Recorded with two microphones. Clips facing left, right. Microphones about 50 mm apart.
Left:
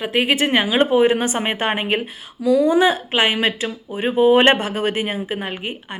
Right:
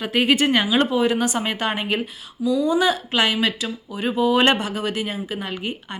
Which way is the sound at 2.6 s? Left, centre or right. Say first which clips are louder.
Left 4 dB; left.